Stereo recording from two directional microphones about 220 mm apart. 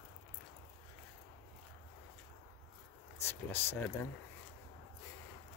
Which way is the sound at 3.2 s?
10° left (ahead or behind).